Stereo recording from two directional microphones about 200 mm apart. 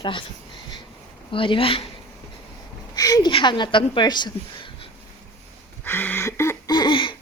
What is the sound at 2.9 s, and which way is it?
A woman's voice, 20° left (ahead or behind).